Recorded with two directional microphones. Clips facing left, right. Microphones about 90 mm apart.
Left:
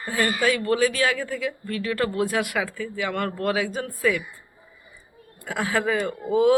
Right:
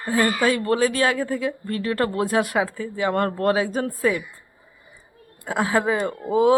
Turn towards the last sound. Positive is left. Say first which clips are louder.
# right 1 dB
turn(degrees=-25)  # may be behind; listen again after turning